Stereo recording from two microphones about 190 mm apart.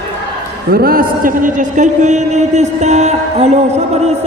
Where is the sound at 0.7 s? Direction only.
50° right (ahead or behind).